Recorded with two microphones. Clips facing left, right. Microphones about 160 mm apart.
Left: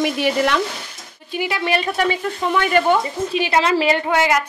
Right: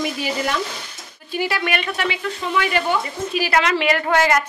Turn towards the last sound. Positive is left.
turn(degrees=10)  # may be behind; listen again after turning